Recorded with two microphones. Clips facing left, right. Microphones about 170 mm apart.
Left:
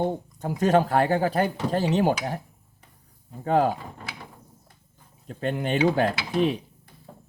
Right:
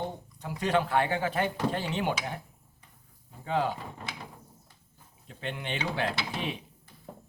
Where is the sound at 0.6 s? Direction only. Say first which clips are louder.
Left 6 dB; 45° left (ahead or behind).